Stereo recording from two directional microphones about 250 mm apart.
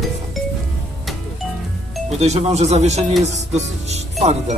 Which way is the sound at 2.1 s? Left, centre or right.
Right.